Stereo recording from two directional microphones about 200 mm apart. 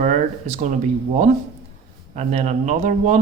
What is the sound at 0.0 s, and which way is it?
Speech, 35° right (ahead or behind).